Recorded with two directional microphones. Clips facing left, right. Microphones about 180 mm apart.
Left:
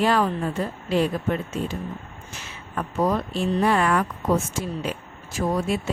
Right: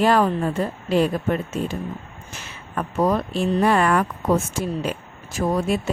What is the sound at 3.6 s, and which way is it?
Speech, 50° right (ahead or behind).